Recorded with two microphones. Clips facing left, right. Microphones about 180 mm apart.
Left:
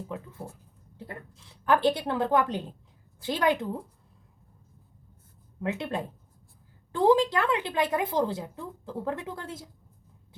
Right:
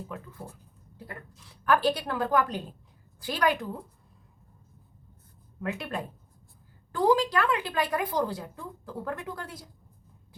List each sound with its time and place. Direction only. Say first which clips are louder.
0.1 s speech: left 3 dB; 25° left (ahead or behind)
5.5 s speech: left 2 dB; 25° left (ahead or behind)